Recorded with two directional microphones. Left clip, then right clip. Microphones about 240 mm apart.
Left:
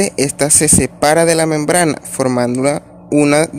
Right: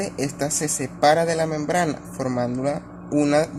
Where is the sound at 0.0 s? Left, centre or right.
Left.